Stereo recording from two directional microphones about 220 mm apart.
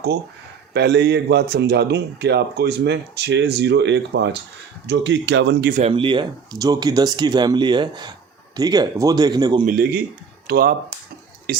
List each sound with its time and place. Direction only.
0.7 s speech: 50° right (ahead or behind)
5.8 s speech: 25° right (ahead or behind)
9.6 s a man's voice: 40° right (ahead or behind)